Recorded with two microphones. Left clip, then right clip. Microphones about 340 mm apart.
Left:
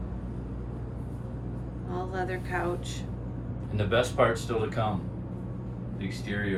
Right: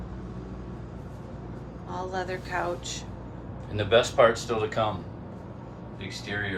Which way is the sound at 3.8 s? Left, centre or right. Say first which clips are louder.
Right 5 dB; right.